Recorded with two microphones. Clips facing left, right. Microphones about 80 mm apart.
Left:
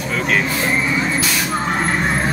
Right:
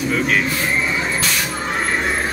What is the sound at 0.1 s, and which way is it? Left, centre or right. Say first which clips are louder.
Speech: left 1 dB; centre.